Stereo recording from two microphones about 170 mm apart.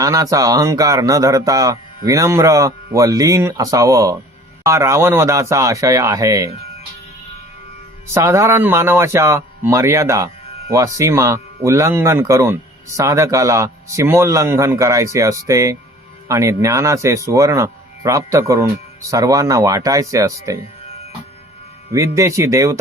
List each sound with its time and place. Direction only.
0.0 s speech: 20° right (ahead or behind)
8.0 s speech: 15° right (ahead or behind)
21.9 s speech: 15° right (ahead or behind)